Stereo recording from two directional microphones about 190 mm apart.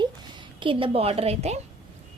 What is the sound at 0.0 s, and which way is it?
A woman's voice, 25° right (ahead or behind).